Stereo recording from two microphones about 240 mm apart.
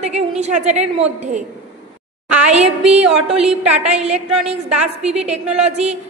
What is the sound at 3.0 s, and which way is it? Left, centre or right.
Speech, centre.